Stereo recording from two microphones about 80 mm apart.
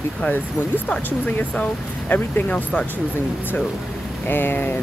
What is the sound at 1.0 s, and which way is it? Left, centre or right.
Speech, left.